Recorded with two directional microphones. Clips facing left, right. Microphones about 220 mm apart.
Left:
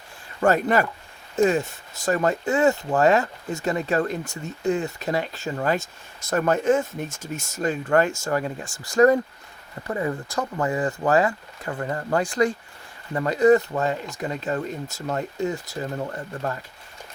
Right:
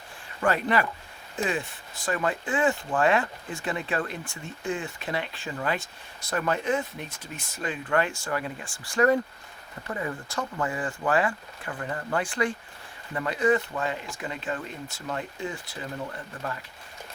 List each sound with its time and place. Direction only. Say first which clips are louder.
0.4 s speech: left 5 dB; 45° left (ahead or behind)